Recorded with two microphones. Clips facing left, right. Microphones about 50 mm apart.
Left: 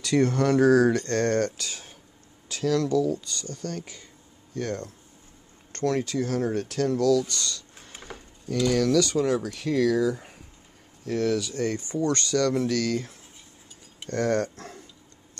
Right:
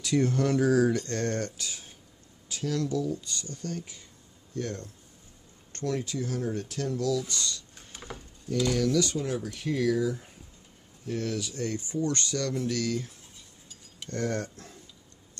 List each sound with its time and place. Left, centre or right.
0.0 s speech: left
2.4 s speech: left
4.6 s speech: left
8.7 s speech: left